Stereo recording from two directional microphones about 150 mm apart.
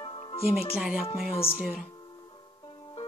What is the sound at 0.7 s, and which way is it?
A woman's voice, 5° right (ahead or behind).